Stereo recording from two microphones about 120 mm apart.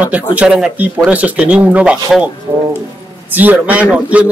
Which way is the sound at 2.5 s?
20° right (ahead or behind).